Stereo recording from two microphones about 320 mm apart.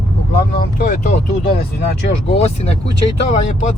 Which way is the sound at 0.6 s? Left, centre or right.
Left.